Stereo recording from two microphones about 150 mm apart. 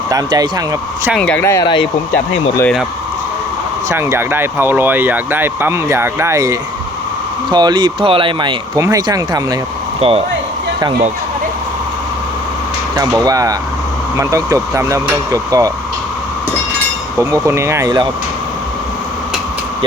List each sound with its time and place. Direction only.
0.1 s speech: 25° right (ahead or behind)
1.2 s speech: 10° left (ahead or behind)
3.8 s speech: 20° right (ahead or behind)
10.0 s speech: 40° right (ahead or behind)
13.0 s speech: 25° right (ahead or behind)
17.2 s speech: 20° right (ahead or behind)